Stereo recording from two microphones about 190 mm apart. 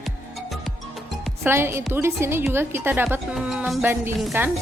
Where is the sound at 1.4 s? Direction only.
15° right (ahead or behind).